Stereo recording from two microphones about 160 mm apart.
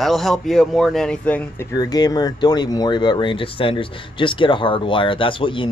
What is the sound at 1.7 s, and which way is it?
Speech, 25° left (ahead or behind).